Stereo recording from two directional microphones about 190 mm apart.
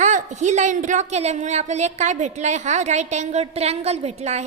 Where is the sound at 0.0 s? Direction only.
40° right (ahead or behind).